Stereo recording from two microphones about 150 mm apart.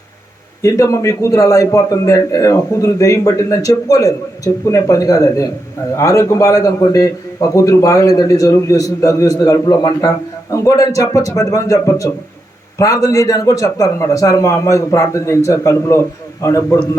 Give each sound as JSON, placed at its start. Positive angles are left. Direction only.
{"t": 0.6, "sound": "a man's voice", "side_deg": 20}